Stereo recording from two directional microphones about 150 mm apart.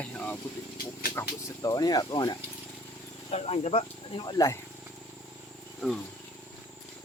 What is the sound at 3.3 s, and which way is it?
Speech, 45° left (ahead or behind).